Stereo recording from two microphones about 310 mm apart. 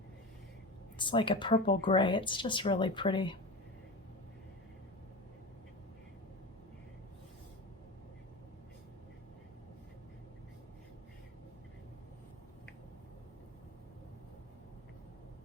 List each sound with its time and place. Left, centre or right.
0.9 s speech: centre